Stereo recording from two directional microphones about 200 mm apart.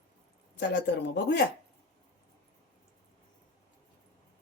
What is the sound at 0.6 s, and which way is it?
Speech, 60° left (ahead or behind).